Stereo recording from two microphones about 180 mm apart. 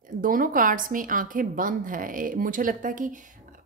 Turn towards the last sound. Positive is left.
turn(degrees=-45)  # may be behind; listen again after turning